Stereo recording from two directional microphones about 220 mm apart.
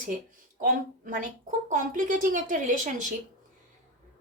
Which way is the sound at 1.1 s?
35° right (ahead or behind).